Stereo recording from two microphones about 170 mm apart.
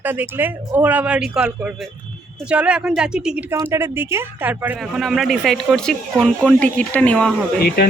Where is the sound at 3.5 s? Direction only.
15° right (ahead or behind); by 7.4 s 5° left (ahead or behind).